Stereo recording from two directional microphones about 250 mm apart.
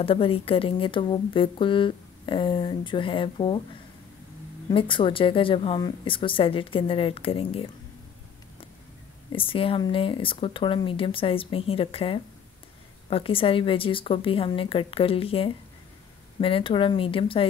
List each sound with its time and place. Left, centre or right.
0.0 s speech: left
4.6 s speech: centre
9.3 s speech: left